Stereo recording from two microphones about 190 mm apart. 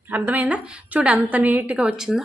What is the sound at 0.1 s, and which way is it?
A woman's voice, 10° right (ahead or behind).